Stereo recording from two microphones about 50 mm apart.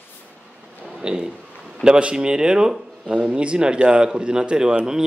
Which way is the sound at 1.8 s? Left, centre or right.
Centre.